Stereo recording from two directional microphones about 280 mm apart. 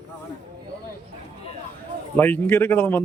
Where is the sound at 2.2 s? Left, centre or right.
Centre.